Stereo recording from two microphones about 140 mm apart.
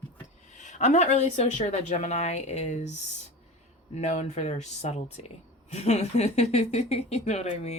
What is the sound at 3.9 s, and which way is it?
Speech, 55° left (ahead or behind).